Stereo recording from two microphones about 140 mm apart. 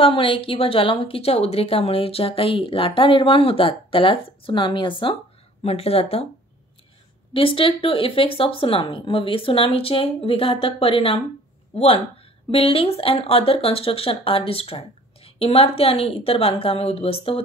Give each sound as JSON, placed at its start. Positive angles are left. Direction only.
{"t": 0.0, "sound": "a woman's voice", "side_deg": 40}
{"t": 5.6, "sound": "a woman's voice", "side_deg": 45}
{"t": 7.3, "sound": "a woman's voice", "side_deg": 40}